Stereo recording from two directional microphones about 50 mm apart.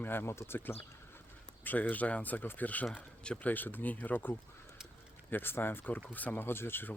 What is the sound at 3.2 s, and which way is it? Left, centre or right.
Speech, centre.